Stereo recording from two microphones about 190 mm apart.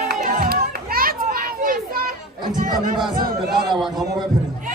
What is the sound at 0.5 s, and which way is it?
Children playing, 50° right (ahead or behind).